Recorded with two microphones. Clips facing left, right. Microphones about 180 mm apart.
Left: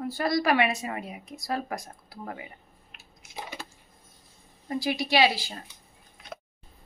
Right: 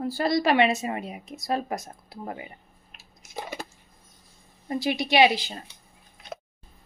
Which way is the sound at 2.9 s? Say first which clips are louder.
Right 4 dB; 45° right (ahead or behind).